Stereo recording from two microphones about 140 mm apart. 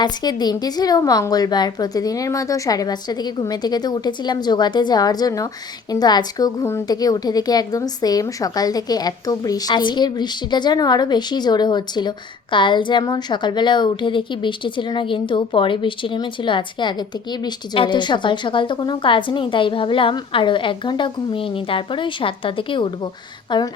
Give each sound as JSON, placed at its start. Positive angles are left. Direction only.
{"t": 0.0, "sound": "a woman's voice", "side_deg": 30}